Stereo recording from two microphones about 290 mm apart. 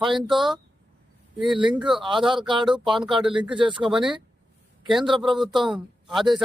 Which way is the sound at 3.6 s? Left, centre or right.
Centre.